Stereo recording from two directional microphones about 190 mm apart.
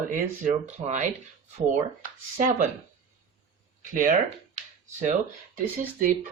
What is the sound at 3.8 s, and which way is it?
Speech, 45° right (ahead or behind).